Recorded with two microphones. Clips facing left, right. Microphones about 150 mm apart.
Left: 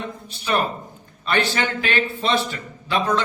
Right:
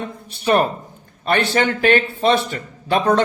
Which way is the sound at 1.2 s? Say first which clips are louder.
Right 4 dB; 50° right (ahead or behind).